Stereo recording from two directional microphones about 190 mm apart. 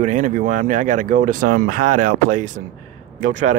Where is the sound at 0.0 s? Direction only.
40° right (ahead or behind).